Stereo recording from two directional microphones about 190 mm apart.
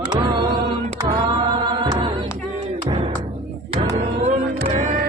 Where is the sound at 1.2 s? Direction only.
25° right (ahead or behind).